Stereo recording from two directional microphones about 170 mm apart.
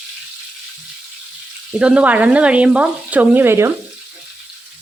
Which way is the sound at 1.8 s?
5° right (ahead or behind).